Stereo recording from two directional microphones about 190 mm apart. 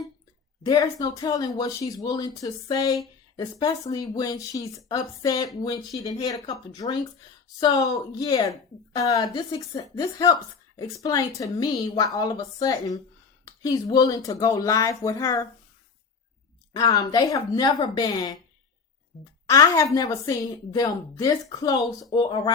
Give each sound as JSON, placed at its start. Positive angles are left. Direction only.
{"t": 0.6, "sound": "a woman's voice", "side_deg": 20}
{"t": 16.7, "sound": "a woman's voice", "side_deg": 20}
{"t": 19.1, "sound": "a woman's voice", "side_deg": 0}
{"t": 19.5, "sound": "a woman's voice", "side_deg": 15}